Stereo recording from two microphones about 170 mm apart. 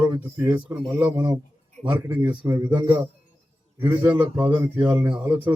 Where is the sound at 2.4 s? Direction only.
20° right (ahead or behind).